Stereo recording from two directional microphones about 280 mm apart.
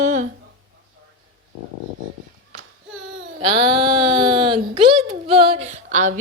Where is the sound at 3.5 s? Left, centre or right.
Centre.